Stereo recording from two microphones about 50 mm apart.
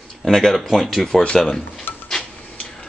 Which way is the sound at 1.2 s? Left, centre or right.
Centre.